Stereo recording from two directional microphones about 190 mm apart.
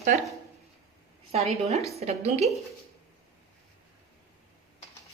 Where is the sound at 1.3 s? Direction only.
35° right (ahead or behind).